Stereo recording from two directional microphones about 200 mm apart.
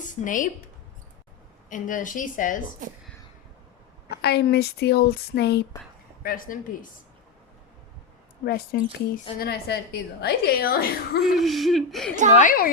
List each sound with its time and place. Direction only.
0.0 s speech: 40° left (ahead or behind)
1.7 s a woman's voice: 40° left (ahead or behind)
4.2 s a woman's voice: 55° left (ahead or behind)
6.2 s a woman's voice: 45° left (ahead or behind)
8.4 s a woman's voice: 50° left (ahead or behind)
11.3 s speech: centre (ahead or behind)
12.4 s a woman's voice: 45° left (ahead or behind)